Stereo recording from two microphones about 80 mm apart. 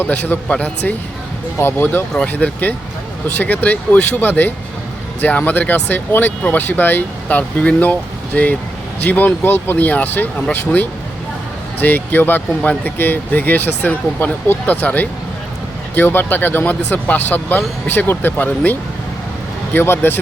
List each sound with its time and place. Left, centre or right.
0.0 s speech: left